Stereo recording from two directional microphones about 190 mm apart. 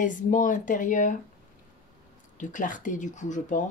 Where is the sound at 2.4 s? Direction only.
45° left (ahead or behind).